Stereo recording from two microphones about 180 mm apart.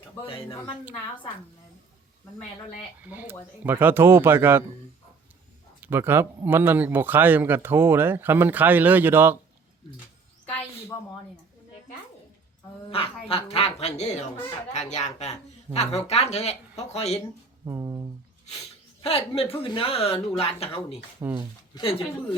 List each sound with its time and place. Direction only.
3.1 s a man's voice: 10° right (ahead or behind)
5.8 s a man's voice: 10° right (ahead or behind)
10.9 s speech: 15° left (ahead or behind)
12.9 s speech: 30° left (ahead or behind)
17.7 s speech: 20° right (ahead or behind)
19.0 s speech: 30° left (ahead or behind)
21.2 s a man's voice: 10° right (ahead or behind)
21.8 s speech: 30° left (ahead or behind)